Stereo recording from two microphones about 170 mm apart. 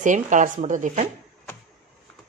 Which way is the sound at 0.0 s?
50° right (ahead or behind).